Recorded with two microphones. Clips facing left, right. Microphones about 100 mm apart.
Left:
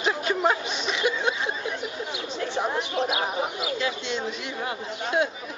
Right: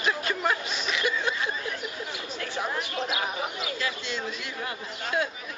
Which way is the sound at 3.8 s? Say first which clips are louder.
Left 3 dB; 25° left (ahead or behind).